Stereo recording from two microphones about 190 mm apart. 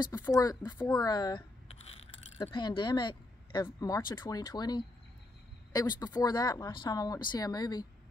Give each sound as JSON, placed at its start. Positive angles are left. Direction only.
{"t": 0.2, "sound": "speech", "side_deg": 20}
{"t": 1.7, "sound": "scrape", "side_deg": 35}
{"t": 2.4, "sound": "a woman's voice", "side_deg": 25}